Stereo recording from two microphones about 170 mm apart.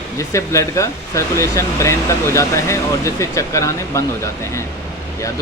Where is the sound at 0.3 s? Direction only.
20° left (ahead or behind).